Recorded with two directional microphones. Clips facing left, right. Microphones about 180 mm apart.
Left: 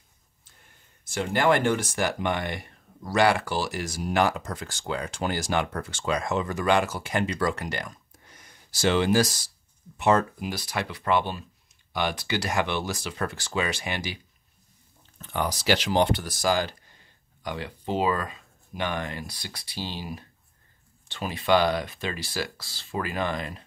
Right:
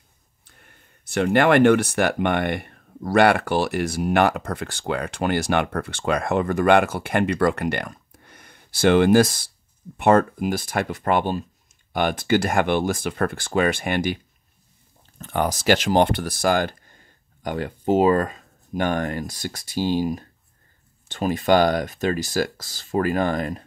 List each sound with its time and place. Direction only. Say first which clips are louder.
0.5 s speech: right 5 dB; 60° right (ahead or behind); by 23.6 s 45° right (ahead or behind)